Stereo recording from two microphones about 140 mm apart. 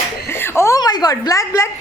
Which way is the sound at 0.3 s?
15° left (ahead or behind).